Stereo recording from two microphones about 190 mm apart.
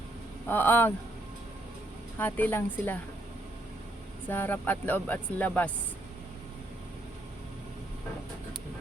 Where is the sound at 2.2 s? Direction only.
10° left (ahead or behind).